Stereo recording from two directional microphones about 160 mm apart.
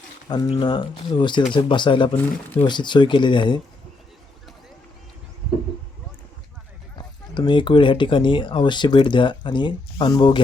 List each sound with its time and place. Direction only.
0.3 s speech: 30° left (ahead or behind)
2.1 s speech: 10° left (ahead or behind)
2.6 s speech: 30° left (ahead or behind)
7.3 s speech: 30° left (ahead or behind)